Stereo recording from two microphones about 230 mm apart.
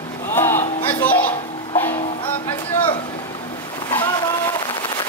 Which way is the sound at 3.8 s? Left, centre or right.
Centre.